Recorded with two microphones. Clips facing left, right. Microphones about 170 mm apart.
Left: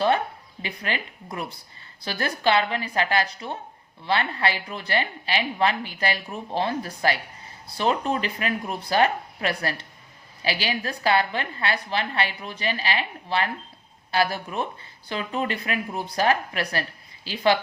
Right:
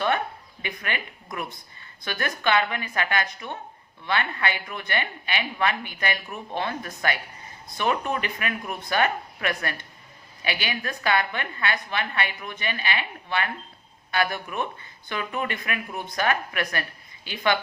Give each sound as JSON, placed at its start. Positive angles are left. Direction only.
{"t": 0.6, "sound": "a woman's voice", "side_deg": 30}